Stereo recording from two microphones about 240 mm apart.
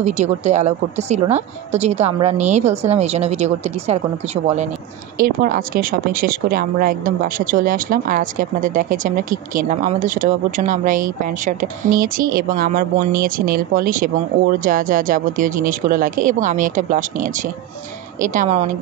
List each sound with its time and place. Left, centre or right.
0.0 s a woman's voice: right
5.2 s speech: right